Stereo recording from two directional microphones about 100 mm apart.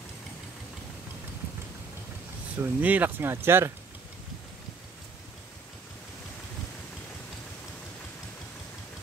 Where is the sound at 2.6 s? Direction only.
15° right (ahead or behind).